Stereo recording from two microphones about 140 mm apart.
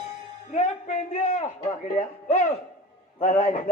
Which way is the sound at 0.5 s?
50° left (ahead or behind).